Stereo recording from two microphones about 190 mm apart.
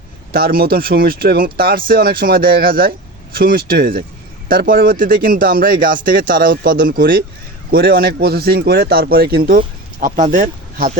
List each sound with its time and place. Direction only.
0.3 s speech: 50° right (ahead or behind)